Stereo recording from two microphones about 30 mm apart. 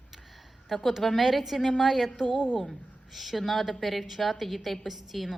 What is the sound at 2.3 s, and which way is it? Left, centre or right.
Speech, centre.